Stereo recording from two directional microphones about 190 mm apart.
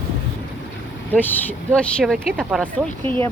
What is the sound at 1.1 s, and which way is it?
Speech, 10° left (ahead or behind).